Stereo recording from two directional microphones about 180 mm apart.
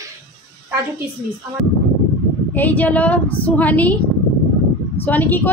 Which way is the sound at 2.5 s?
10° left (ahead or behind).